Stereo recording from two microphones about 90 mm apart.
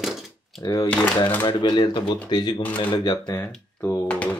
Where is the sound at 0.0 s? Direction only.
5° right (ahead or behind).